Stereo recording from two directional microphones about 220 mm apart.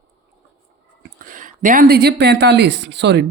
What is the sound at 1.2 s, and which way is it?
Speech, 35° right (ahead or behind).